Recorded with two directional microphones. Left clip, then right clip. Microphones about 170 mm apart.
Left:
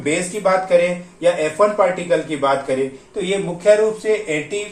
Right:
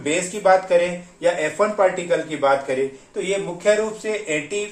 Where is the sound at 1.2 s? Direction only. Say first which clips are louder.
Left 4 dB; 35° right (ahead or behind).